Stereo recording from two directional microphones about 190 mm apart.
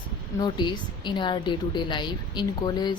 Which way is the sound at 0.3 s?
25° left (ahead or behind).